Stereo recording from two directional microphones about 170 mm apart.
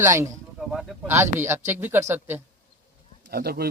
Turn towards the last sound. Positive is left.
turn(degrees=-65)  # may be behind; listen again after turning